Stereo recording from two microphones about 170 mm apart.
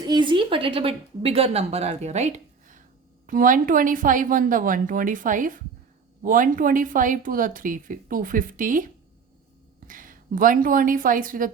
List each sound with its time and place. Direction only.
0.0 s a woman's voice: 25° right (ahead or behind); by 11.5 s 55° right (ahead or behind)